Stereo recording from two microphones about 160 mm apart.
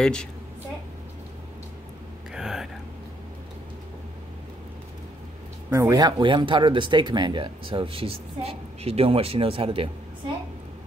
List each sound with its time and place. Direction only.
0.0 s a woman's voice: 5° left (ahead or behind)
2.3 s a sound: centre (ahead or behind)
5.7 s speech: 20° right (ahead or behind)